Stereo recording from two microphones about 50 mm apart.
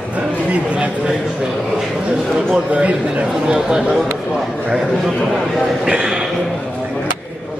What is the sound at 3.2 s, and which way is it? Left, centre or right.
A man's voice, centre.